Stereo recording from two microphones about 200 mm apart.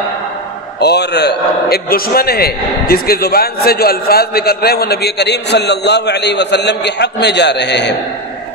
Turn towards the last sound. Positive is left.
turn(degrees=60)  # may be behind; listen again after turning